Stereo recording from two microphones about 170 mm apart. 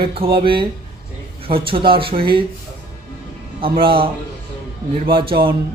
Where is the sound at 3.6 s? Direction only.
30° right (ahead or behind).